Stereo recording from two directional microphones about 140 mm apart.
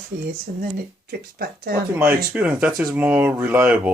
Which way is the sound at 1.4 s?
90° right.